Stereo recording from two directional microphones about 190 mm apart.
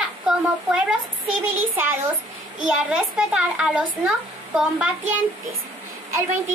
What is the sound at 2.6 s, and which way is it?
A child's voice, 5° right (ahead or behind).